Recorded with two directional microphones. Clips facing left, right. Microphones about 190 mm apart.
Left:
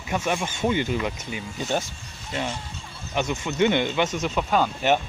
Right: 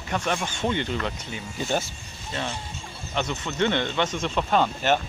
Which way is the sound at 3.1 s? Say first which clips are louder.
Left 2 dB; 10° left (ahead or behind).